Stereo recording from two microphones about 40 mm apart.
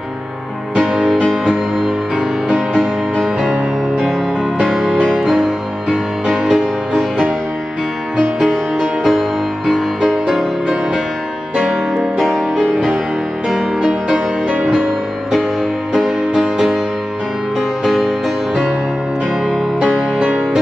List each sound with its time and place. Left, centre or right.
2.5 s music: centre
4.6 s music: centre
5.3 s music: centre
8.5 s music: centre
9.8 s music: centre
12.3 s music: centre
13.8 s music: centre
14.5 s music: right
15.9 s music: centre
20.2 s music: right